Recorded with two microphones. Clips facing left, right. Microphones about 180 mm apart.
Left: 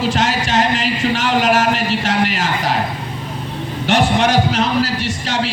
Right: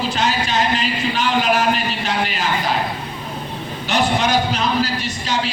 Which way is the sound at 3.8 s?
90° left.